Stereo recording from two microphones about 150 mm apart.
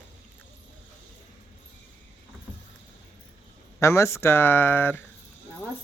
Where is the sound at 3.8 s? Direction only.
20° left (ahead or behind).